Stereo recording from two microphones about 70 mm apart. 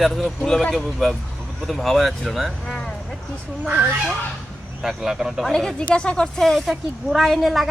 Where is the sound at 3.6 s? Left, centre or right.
Right.